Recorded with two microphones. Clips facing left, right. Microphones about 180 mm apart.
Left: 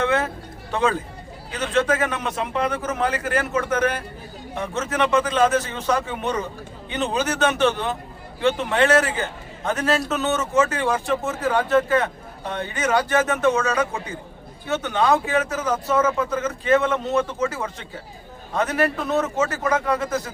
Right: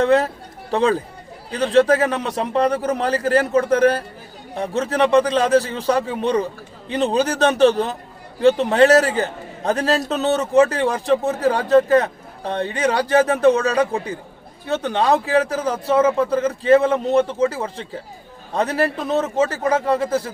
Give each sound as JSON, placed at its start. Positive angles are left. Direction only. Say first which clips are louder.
{"t": 0.0, "sound": "a man's voice", "louder": "right 6 dB", "side_deg": -35}